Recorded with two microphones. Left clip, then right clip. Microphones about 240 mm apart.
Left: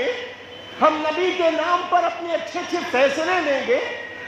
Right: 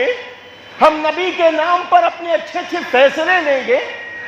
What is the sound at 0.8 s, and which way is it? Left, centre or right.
A man's voice, right.